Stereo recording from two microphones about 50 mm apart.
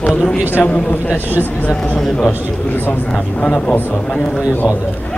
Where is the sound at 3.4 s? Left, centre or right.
Left.